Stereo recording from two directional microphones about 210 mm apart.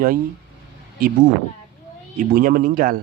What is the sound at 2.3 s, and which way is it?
Speech, 40° right (ahead or behind).